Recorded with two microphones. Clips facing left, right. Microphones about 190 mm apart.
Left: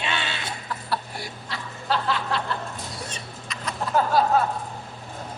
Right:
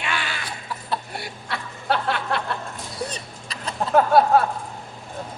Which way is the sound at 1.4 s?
60° right (ahead or behind).